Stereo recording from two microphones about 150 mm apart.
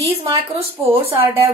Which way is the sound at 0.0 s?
40° right (ahead or behind).